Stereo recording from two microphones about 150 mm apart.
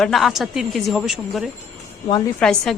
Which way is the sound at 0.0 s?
Centre (ahead or behind).